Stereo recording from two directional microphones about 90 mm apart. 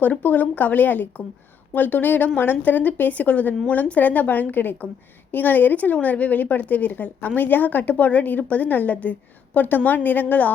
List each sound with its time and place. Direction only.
0.0 s a woman's voice: 20° left (ahead or behind)